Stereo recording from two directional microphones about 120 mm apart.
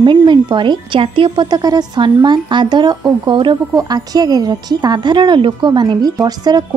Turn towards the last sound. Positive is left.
turn(degrees=-35)  # may be behind; listen again after turning